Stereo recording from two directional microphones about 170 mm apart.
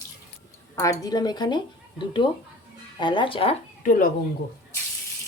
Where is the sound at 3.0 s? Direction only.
30° left (ahead or behind).